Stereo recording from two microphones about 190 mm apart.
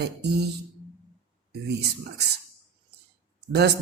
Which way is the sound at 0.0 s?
60° right (ahead or behind).